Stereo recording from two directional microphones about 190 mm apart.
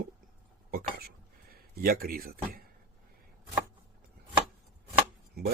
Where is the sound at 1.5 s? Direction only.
50° right (ahead or behind).